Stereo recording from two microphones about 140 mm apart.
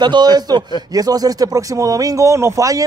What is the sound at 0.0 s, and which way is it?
A man's voice, 30° right (ahead or behind).